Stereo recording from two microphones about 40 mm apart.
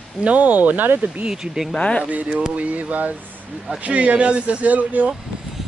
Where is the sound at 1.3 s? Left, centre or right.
Centre.